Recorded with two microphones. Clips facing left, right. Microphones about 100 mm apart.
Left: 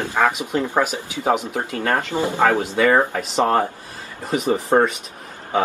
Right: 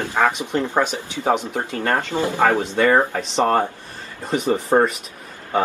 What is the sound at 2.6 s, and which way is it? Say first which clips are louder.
Speech: even; 5° left (ahead or behind).